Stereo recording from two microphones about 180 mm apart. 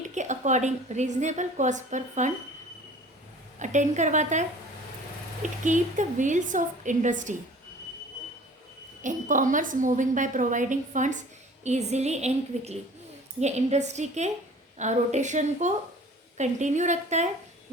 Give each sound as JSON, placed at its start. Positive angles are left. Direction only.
{"t": 0.0, "sound": "a woman's voice", "side_deg": -40}
{"t": 3.6, "sound": "a woman's voice", "side_deg": -40}
{"t": 9.0, "sound": "a woman's voice", "side_deg": -45}